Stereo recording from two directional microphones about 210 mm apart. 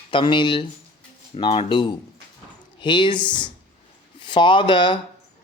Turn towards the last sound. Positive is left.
turn(degrees=20)  # may be behind; listen again after turning